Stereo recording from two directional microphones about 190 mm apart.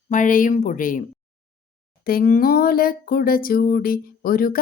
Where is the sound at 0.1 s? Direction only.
45° left (ahead or behind).